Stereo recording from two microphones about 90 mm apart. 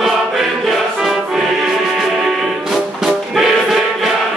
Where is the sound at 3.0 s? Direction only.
5° right (ahead or behind).